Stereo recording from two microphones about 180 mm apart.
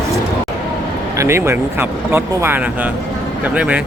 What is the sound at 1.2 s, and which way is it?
Speech, 15° right (ahead or behind).